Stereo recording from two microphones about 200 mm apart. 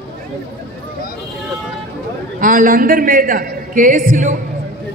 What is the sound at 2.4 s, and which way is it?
A man's voice, 45° right (ahead or behind).